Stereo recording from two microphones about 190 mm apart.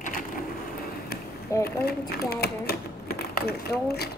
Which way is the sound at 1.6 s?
55° left (ahead or behind).